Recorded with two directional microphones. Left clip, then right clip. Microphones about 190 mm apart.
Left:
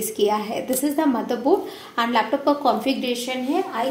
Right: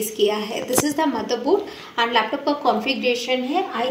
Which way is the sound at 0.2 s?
55° left (ahead or behind).